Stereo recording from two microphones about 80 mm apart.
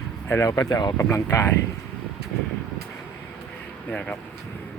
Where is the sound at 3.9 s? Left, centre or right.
Centre.